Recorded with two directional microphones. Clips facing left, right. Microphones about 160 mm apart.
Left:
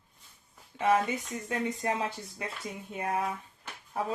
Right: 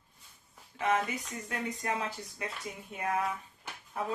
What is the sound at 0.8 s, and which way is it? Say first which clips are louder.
Speech: left 4 dB; 30° left (ahead or behind).